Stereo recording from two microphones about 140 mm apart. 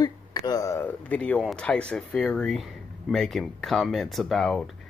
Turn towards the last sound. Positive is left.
turn(degrees=0)  # may be behind; listen again after turning